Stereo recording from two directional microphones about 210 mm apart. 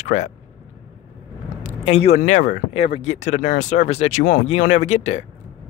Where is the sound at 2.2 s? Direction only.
35° left (ahead or behind).